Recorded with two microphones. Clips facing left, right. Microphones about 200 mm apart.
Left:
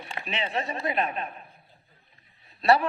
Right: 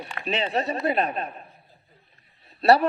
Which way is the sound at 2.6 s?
40° right (ahead or behind).